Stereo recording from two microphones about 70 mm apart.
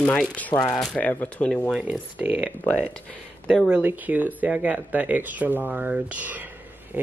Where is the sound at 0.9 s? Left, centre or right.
Left.